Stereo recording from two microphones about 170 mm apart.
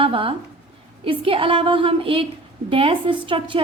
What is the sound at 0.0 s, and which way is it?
A woman's voice, 30° right (ahead or behind).